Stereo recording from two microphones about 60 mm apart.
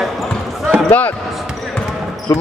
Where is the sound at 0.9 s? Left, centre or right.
Left.